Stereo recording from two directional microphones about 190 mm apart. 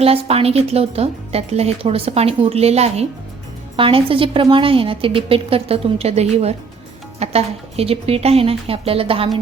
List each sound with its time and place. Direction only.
0.0 s a woman's voice: 30° right (ahead or behind)